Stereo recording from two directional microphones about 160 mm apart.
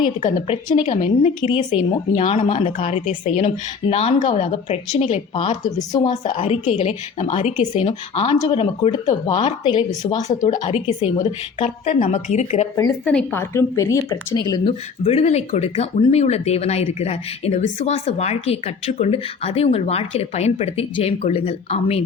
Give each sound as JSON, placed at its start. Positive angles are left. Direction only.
{"t": 0.8, "sound": "speech", "side_deg": 45}
{"t": 1.4, "sound": "speech", "side_deg": 30}
{"t": 2.1, "sound": "speech", "side_deg": 45}
{"t": 2.7, "sound": "speech", "side_deg": 55}
{"t": 5.6, "sound": "speech", "side_deg": 25}
{"t": 6.3, "sound": "speech", "side_deg": 45}
{"t": 10.3, "sound": "speech", "side_deg": 50}
{"t": 13.1, "sound": "speech", "side_deg": 5}
{"t": 13.4, "sound": "speech", "side_deg": 15}
{"t": 14.7, "sound": "speech", "side_deg": 40}